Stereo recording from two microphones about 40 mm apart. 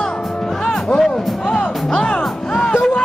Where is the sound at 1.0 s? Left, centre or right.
Centre.